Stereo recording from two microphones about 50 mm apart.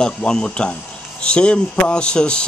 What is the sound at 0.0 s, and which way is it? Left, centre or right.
Speech, centre.